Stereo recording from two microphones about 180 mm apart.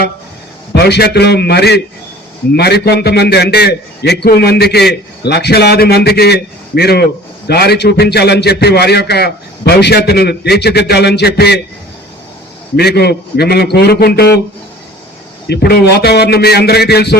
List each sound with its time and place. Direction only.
0.7 s a man's voice: 65° left (ahead or behind)
12.7 s a man's voice: 65° left (ahead or behind)
15.4 s a man's voice: 65° left (ahead or behind)